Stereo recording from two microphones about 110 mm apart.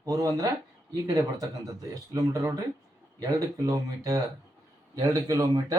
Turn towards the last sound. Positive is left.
turn(degrees=-30)  # may be behind; listen again after turning